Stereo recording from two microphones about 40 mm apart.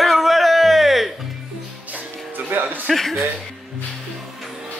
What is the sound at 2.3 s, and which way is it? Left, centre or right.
Music, right.